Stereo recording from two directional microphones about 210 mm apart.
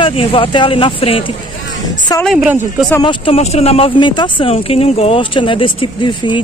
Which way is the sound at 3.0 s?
25° left (ahead or behind).